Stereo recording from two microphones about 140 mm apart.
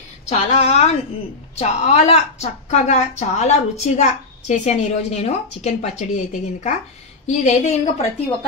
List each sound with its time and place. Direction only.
0.3 s a woman's voice: 50° left (ahead or behind)